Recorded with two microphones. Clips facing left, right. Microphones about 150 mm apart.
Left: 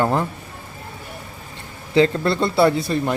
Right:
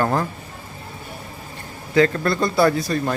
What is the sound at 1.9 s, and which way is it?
Speech, 25° left (ahead or behind).